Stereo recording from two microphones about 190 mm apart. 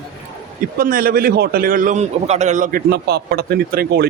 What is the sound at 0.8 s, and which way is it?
A man's voice, 50° right (ahead or behind).